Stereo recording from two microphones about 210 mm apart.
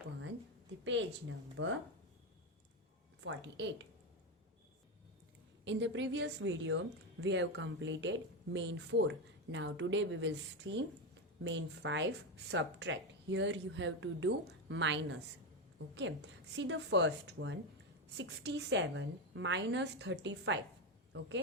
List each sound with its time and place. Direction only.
1.6 s a woman's voice: 65° right (ahead or behind)
3.2 s a woman's voice: 55° right (ahead or behind)
5.6 s a woman's voice: 60° right (ahead or behind)